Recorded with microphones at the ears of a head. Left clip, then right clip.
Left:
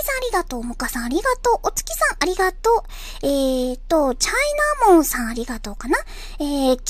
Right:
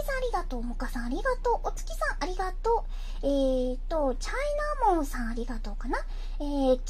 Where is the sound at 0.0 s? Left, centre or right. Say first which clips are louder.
Left 9 dB; left.